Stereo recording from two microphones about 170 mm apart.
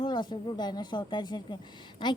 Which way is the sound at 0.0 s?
25° left (ahead or behind).